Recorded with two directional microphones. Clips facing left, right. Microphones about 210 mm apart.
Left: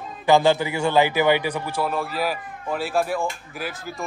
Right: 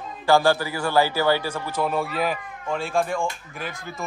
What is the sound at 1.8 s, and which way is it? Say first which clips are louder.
Speech: right 2 dB; centre (ahead or behind).